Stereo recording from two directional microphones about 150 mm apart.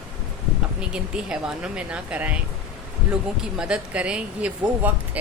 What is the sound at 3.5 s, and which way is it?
Speech, 5° right (ahead or behind).